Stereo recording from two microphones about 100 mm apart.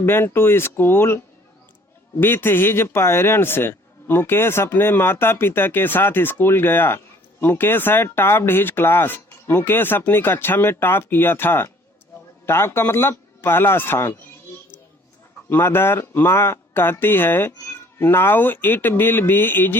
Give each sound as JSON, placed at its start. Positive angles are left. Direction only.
{"t": 0.0, "sound": "speech", "side_deg": 25}
{"t": 2.2, "sound": "speech", "side_deg": 20}
{"t": 15.4, "sound": "speech", "side_deg": 25}